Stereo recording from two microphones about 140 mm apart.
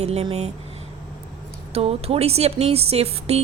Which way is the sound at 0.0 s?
50° right (ahead or behind).